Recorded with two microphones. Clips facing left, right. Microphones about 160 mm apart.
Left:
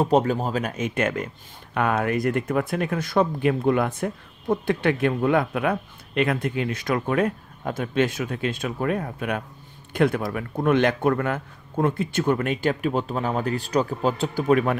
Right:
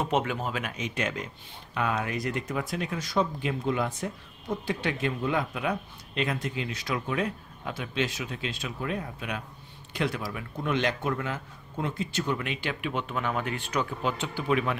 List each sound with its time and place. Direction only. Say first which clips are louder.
0.0 s a man's voice: left 8 dB; 35° left (ahead or behind)